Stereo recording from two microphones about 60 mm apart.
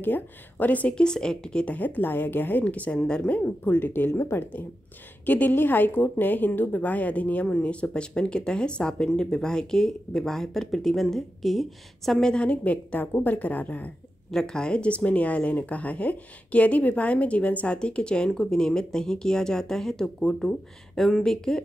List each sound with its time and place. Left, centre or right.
0.0 s speech: left
1.8 s a woman's voice: left
2.6 s speech: left
3.6 s a woman's voice: left
14.3 s speech: centre